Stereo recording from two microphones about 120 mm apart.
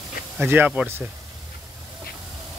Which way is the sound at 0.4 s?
15° right (ahead or behind).